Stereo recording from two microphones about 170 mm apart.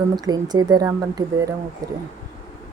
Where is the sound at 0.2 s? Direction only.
25° right (ahead or behind).